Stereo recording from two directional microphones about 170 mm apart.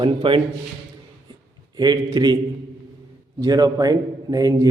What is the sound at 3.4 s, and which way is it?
A man's voice, 25° right (ahead or behind).